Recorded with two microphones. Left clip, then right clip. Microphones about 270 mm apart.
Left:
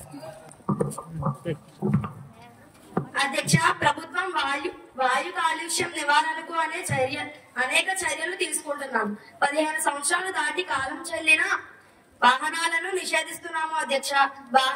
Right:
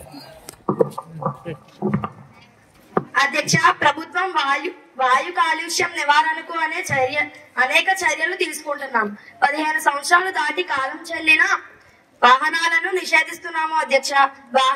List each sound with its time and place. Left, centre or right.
1.2 s a sound: right
1.8 s speech: right
2.9 s a woman's voice: centre